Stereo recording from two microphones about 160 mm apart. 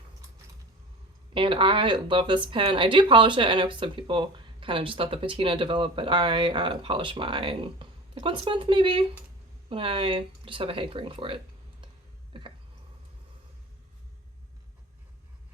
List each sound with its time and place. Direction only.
1.3 s speech: 35° right (ahead or behind)